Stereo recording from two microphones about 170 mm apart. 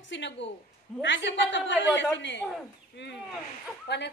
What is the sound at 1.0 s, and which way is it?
A woman's voice, 90° left.